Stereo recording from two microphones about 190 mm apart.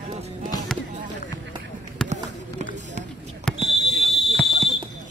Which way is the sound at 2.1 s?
35° right (ahead or behind).